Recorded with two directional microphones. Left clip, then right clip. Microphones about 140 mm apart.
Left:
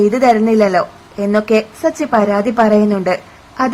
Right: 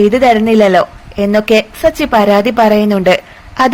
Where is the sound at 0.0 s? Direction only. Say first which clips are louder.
Right 3 dB; 10° right (ahead or behind).